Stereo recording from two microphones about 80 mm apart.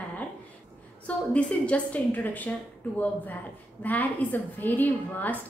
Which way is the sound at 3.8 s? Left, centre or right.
Left.